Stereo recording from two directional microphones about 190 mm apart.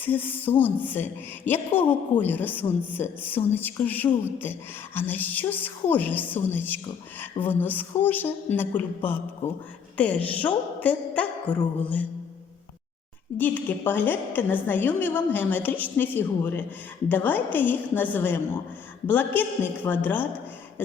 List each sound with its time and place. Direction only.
0.0 s a woman's voice: 10° left (ahead or behind)
13.4 s a woman's voice: 10° left (ahead or behind)